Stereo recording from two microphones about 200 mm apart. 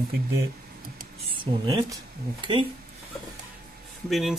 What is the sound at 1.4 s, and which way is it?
Speech, 20° right (ahead or behind).